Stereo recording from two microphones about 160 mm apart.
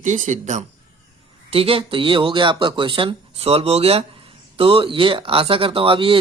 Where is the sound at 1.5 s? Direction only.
35° right (ahead or behind).